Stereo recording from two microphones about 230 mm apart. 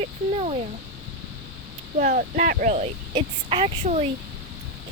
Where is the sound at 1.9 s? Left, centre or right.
Right.